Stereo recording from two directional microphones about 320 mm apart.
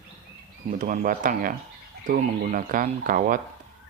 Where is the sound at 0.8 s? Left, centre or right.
Right.